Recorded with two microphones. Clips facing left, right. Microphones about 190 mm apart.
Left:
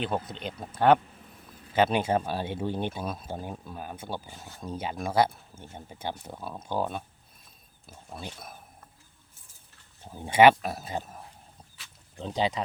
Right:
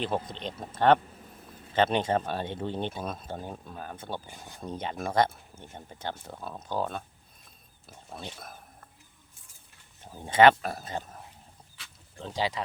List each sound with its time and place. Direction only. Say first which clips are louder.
0.0 s speech: even; 5° left (ahead or behind)
4.3 s speech: even; 15° right (ahead or behind)
4.6 s speech: left 1 dB; 5° left (ahead or behind)
7.9 s a sound: left 1 dB; centre (ahead or behind)
10.2 s speech: left 1 dB; 10° left (ahead or behind)